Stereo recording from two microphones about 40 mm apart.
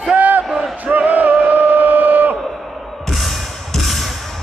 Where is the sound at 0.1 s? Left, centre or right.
Right.